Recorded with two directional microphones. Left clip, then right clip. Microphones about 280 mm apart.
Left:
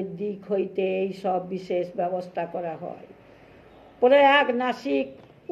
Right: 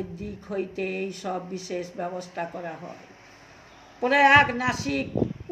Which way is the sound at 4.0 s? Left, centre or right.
Centre.